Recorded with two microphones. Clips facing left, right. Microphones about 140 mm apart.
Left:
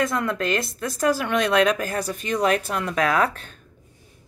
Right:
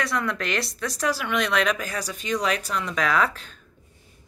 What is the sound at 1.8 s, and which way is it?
Speech, 50° left (ahead or behind).